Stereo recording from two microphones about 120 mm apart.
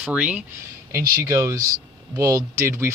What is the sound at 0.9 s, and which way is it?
Speech, 25° right (ahead or behind).